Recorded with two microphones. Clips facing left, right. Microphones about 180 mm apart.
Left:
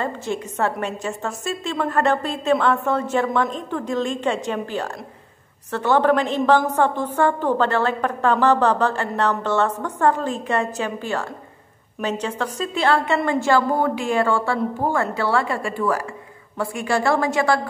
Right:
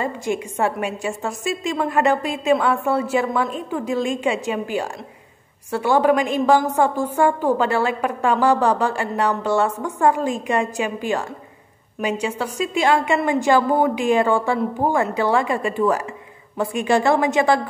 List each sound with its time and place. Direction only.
0.0 s a woman's voice: 10° right (ahead or behind)